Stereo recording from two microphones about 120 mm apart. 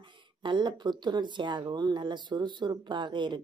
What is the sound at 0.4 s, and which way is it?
Speech, 40° right (ahead or behind).